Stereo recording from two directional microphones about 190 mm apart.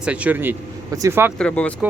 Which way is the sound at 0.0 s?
5° right (ahead or behind).